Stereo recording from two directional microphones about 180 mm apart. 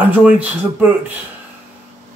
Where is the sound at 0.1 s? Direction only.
5° right (ahead or behind).